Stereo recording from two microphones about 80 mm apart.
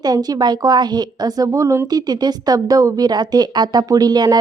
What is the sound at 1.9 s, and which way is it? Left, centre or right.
A woman's voice, right.